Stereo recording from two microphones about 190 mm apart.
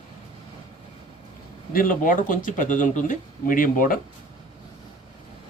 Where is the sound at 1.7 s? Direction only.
45° left (ahead or behind).